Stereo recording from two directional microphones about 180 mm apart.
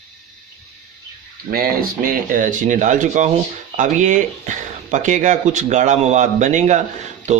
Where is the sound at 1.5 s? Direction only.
55° right (ahead or behind).